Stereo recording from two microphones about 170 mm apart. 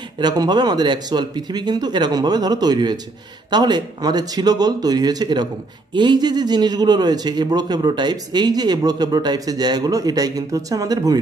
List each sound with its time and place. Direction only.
0.2 s a man's voice: 25° right (ahead or behind)